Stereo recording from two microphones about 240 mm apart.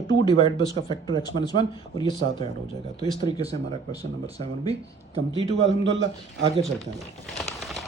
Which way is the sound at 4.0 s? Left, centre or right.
Right.